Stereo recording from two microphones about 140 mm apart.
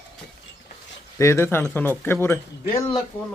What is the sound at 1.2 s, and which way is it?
Speech, 20° left (ahead or behind).